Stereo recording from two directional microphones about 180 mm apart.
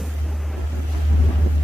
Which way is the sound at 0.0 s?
Centre (ahead or behind).